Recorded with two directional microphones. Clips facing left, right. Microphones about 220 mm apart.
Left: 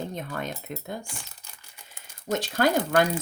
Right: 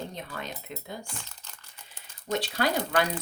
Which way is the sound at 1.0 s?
10° left (ahead or behind).